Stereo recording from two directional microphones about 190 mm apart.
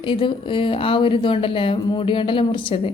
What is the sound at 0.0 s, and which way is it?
A woman's voice, 25° left (ahead or behind).